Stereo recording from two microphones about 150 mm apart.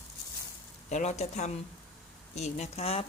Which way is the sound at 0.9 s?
55° left (ahead or behind).